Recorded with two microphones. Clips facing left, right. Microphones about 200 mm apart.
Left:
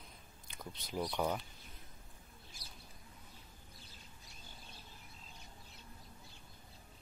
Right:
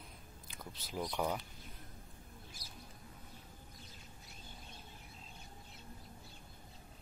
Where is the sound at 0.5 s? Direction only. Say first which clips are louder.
Left 2 dB; 5° right (ahead or behind).